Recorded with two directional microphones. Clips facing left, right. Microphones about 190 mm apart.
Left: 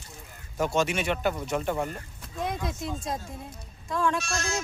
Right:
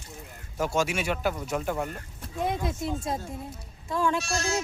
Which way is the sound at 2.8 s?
25° right (ahead or behind).